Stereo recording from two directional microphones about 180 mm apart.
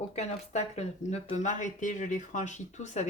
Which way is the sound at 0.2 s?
40° left (ahead or behind).